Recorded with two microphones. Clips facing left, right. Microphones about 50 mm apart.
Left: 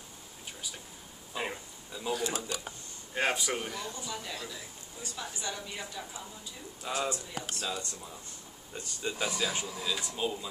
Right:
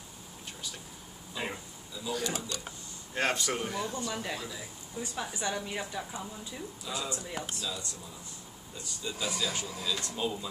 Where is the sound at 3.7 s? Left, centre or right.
Centre.